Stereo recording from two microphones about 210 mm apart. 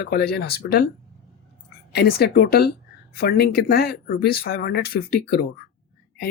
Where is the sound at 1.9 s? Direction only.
50° left (ahead or behind).